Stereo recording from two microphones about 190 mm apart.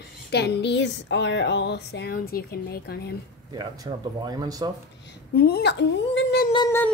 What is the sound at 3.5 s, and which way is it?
Speech, 20° right (ahead or behind).